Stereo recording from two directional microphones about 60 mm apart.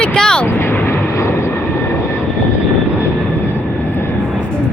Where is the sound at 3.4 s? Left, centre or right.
Left.